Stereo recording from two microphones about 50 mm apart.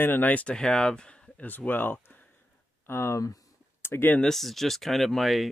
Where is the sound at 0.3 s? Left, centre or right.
Left.